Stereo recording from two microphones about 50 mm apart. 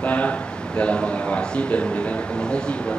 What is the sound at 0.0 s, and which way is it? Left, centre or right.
A man's voice, left.